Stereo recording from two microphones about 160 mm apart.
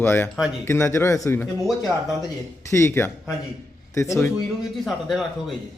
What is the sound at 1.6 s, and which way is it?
Speech, centre (ahead or behind).